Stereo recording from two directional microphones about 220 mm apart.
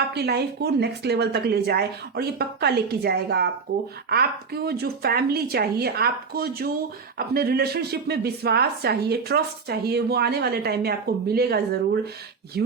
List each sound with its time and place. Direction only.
0.1 s speech: 45° right (ahead or behind)